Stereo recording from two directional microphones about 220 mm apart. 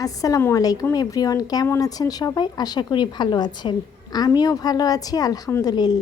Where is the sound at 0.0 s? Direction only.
15° left (ahead or behind).